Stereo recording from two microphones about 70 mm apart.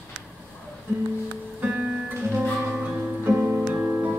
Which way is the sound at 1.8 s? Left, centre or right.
Centre.